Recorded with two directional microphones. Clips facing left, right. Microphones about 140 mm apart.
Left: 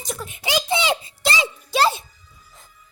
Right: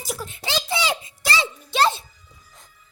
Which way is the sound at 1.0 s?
30° left (ahead or behind).